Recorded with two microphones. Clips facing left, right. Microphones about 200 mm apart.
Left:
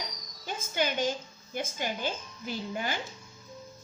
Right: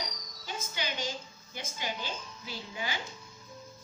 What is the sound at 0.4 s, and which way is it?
Cricket, 50° left (ahead or behind).